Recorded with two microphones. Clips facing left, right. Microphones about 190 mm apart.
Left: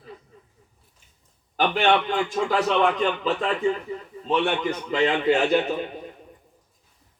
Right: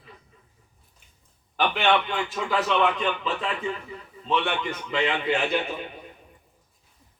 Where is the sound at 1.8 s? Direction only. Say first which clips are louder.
Left 3 dB; 40° left (ahead or behind).